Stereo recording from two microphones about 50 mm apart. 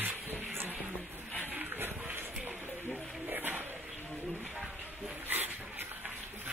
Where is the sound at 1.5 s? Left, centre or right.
Right.